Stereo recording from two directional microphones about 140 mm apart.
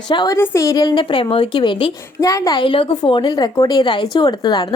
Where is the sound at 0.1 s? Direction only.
35° left (ahead or behind).